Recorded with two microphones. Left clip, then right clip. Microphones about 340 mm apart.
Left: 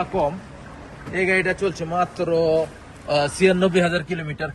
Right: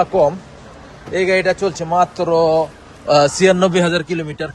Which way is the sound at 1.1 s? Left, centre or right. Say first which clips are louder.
Right 5 dB; centre.